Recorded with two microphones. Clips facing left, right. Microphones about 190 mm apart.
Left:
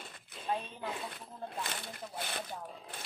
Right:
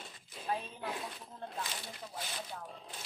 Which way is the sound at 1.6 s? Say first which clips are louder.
Left 3 dB; 55° left (ahead or behind).